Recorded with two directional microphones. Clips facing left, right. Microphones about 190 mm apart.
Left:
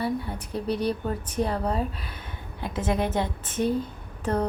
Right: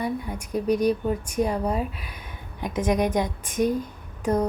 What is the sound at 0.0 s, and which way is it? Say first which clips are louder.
Speech: even; 15° right (ahead or behind).